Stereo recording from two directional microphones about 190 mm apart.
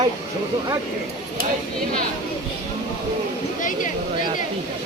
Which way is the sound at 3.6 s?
45° left (ahead or behind).